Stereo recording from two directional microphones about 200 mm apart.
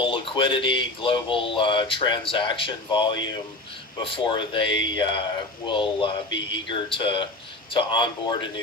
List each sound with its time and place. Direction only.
0.0 s speech: 25° left (ahead or behind)